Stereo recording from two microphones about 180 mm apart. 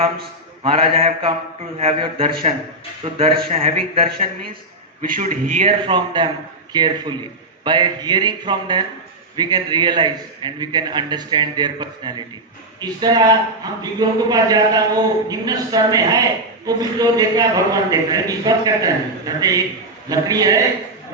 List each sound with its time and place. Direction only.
0.6 s speech: 30° right (ahead or behind)
5.0 s a man's voice: 50° right (ahead or behind)
5.6 s a man's voice: 25° right (ahead or behind)